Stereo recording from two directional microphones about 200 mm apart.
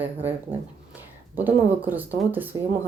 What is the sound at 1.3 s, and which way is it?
Speech, 10° right (ahead or behind).